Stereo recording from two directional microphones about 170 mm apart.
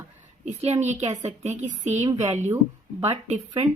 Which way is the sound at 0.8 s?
40° right (ahead or behind).